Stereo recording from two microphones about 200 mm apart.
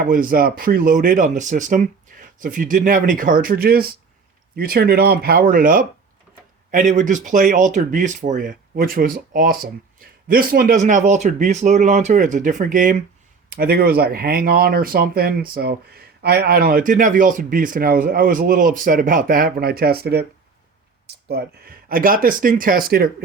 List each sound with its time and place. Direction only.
0.0 s speech: 45° right (ahead or behind)
21.2 s speech: 50° right (ahead or behind)